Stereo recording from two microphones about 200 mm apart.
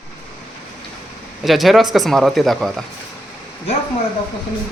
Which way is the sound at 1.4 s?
Centre (ahead or behind).